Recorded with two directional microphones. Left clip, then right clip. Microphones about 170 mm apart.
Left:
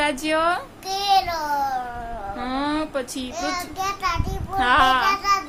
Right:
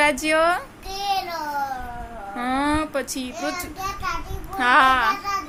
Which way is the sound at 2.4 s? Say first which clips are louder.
Right 3 dB; 20° right (ahead or behind).